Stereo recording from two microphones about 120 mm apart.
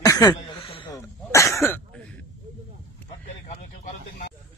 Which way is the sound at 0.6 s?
50° left (ahead or behind).